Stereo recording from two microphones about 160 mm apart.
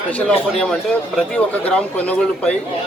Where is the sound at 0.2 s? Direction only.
5° left (ahead or behind).